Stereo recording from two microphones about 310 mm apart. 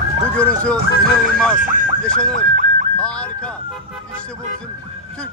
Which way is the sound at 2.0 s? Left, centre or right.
Centre.